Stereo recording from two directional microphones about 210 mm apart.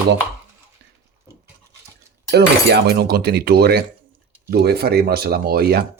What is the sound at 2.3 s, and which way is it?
Speech, 50° right (ahead or behind).